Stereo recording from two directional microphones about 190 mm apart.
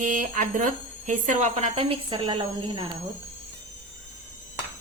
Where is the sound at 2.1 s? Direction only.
25° right (ahead or behind).